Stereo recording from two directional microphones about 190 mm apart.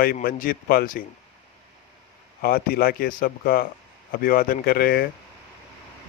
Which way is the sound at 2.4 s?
50° left (ahead or behind).